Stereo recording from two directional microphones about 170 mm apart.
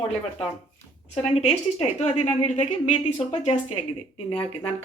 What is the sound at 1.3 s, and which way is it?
A woman's voice, 40° left (ahead or behind).